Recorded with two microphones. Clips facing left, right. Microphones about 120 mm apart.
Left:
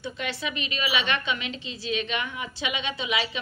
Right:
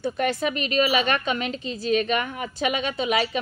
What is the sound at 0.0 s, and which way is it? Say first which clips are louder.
A woman's voice: right 8 dB; 50° right (ahead or behind).